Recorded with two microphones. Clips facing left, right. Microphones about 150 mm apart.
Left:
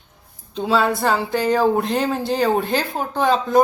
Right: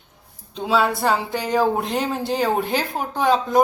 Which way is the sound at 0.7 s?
10° right (ahead or behind).